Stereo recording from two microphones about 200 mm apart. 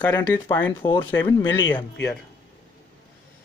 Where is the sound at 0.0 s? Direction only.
10° left (ahead or behind).